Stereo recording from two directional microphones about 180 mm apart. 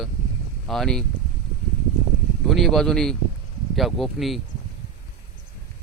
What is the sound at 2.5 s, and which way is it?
Speech, centre (ahead or behind).